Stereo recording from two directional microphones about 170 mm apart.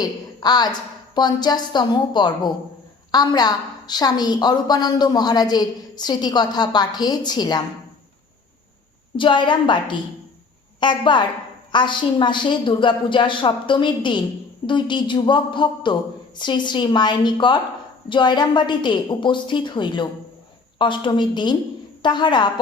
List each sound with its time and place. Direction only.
0.0 s a woman's voice: 25° left (ahead or behind)
9.1 s a woman's voice: 30° left (ahead or behind)